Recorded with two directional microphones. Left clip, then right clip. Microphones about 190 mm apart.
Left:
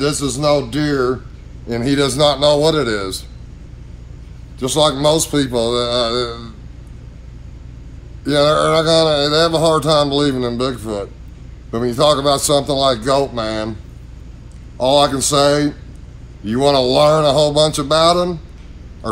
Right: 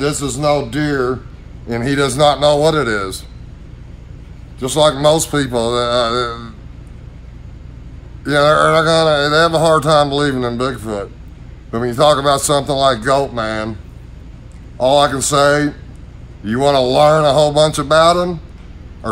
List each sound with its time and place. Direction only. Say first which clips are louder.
0.4 s speech: even; 10° right (ahead or behind)
4.6 s a man's voice: right 2 dB; 10° right (ahead or behind)
8.3 s speech: right 2 dB; 15° right (ahead or behind)
14.8 s a man's voice: right 1 dB; 10° right (ahead or behind)